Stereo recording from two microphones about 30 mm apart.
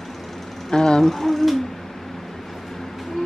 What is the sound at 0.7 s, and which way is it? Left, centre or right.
Vehicle, left.